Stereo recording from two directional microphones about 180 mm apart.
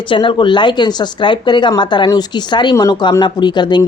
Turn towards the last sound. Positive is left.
turn(degrees=25)  # may be behind; listen again after turning